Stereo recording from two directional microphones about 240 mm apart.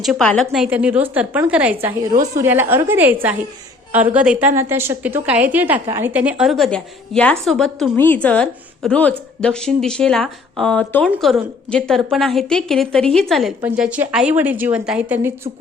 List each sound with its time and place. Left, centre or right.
0.0 s a woman's voice: centre